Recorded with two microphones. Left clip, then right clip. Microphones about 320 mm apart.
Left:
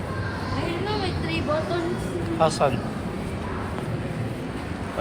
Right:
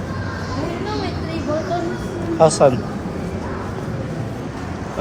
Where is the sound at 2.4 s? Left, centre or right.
Centre.